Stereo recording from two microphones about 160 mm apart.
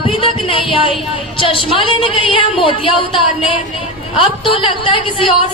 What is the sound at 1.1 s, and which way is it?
A woman's voice, 35° left (ahead or behind).